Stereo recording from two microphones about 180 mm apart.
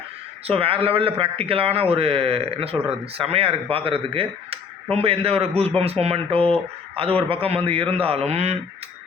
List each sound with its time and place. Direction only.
0.4 s speech: 30° right (ahead or behind)